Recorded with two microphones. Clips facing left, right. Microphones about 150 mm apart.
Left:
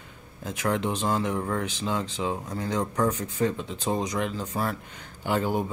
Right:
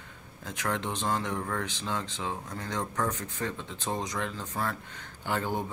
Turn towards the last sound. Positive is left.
turn(degrees=10)  # may be behind; listen again after turning